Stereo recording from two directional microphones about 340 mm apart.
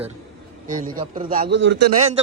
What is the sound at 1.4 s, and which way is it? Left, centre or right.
Speech, right.